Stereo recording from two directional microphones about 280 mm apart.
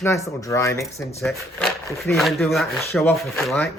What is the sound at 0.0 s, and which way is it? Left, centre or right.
Speech, centre.